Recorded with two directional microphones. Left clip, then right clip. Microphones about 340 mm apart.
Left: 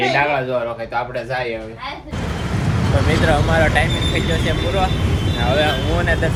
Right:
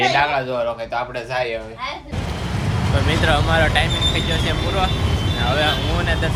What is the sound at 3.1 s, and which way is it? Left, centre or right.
Speech, centre.